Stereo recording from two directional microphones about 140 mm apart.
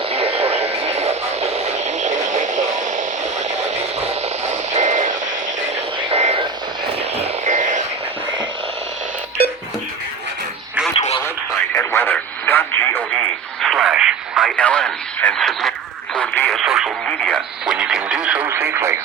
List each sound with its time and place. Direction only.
0.1 s radio: 45° right (ahead or behind); by 3.0 s 65° right (ahead or behind)
3.8 s vehicle: 50° right (ahead or behind)
6.0 s vehicle: 45° right (ahead or behind)
10.9 s radio: 45° left (ahead or behind)
11.7 s radio: 15° left (ahead or behind)
13.1 s radio: centre (ahead or behind)
14.4 s radio: 10° left (ahead or behind)
16.6 s radio: centre (ahead or behind)
17.1 s radio: 10° left (ahead or behind)
17.3 s radio: 5° right (ahead or behind)
18.4 s radio: 15° right (ahead or behind)